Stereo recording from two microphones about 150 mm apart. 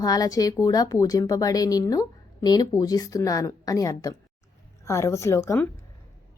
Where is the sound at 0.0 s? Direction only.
25° left (ahead or behind).